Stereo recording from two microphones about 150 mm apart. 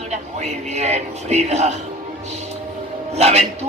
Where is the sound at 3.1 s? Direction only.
45° right (ahead or behind).